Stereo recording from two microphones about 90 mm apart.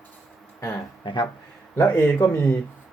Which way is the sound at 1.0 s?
60° left (ahead or behind).